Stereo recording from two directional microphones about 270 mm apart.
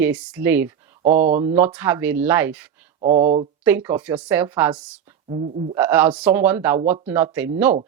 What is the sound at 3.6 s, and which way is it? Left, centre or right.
Speech, centre.